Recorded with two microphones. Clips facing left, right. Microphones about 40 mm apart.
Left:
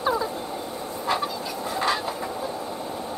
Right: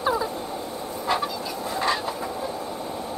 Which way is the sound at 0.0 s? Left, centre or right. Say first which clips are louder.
Even; centre.